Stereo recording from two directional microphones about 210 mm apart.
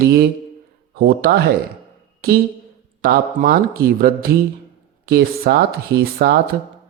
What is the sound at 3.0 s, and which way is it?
Speech, 45° right (ahead or behind).